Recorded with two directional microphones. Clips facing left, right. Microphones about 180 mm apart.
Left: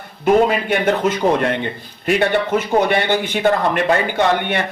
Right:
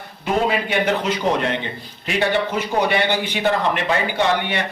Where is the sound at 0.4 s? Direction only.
50° left (ahead or behind).